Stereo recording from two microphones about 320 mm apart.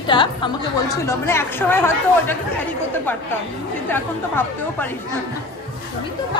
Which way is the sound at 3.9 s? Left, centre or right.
Centre.